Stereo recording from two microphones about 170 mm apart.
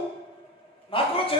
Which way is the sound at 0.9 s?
30° left (ahead or behind).